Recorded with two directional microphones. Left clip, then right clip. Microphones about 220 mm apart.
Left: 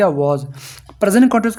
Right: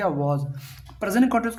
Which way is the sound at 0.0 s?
40° left (ahead or behind).